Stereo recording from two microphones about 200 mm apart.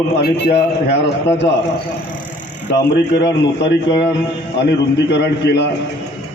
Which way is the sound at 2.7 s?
60° left (ahead or behind).